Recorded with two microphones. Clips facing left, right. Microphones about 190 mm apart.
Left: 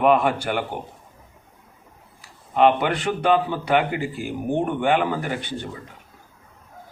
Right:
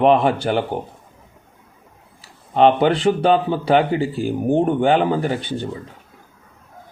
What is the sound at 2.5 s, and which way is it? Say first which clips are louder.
Speech: right 4 dB; 30° right (ahead or behind).